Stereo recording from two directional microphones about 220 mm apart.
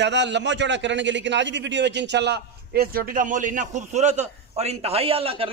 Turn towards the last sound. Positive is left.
turn(degrees=-25)  # may be behind; listen again after turning